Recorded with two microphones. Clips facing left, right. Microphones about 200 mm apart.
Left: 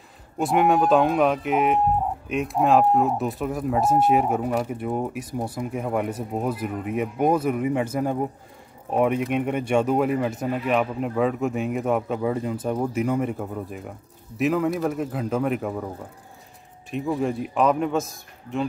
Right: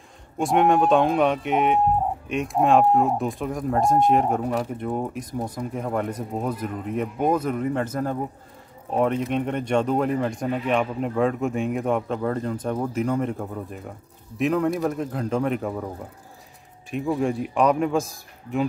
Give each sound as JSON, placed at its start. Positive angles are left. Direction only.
{"t": 0.4, "sound": "speech", "side_deg": 5}
{"t": 16.9, "sound": "speech", "side_deg": 0}